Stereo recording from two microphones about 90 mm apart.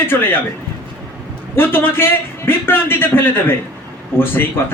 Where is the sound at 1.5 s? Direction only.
25° left (ahead or behind).